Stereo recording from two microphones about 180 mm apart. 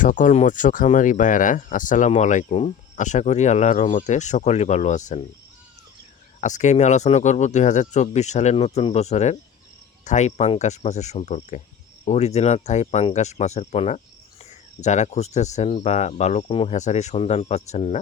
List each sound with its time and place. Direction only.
0.0 s speech: 45° left (ahead or behind)
6.4 s speech: 40° left (ahead or behind)